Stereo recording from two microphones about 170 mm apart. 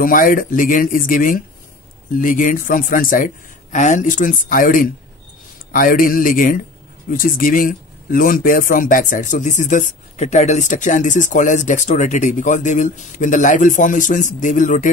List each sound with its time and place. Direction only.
0.0 s a man's voice: 55° left (ahead or behind)